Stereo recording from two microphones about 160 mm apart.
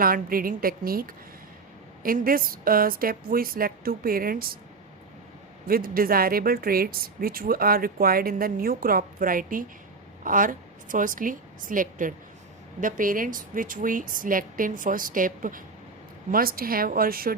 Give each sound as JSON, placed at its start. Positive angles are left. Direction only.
{"t": 0.0, "sound": "speech", "side_deg": -65}
{"t": 5.6, "sound": "speech", "side_deg": -65}